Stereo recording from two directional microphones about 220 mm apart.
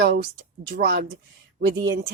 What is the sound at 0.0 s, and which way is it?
Speech, 45° right (ahead or behind).